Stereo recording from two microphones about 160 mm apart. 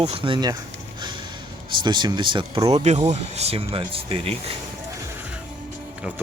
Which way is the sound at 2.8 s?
45° right (ahead or behind).